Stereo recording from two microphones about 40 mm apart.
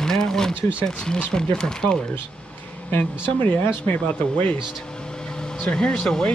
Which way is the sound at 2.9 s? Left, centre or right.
Left.